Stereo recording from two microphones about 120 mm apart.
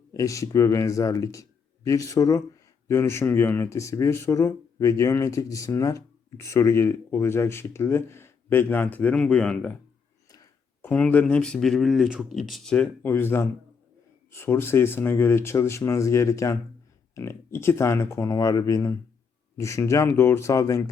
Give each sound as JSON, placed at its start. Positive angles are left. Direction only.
{"t": 0.1, "sound": "speech", "side_deg": 25}
{"t": 10.8, "sound": "speech", "side_deg": 10}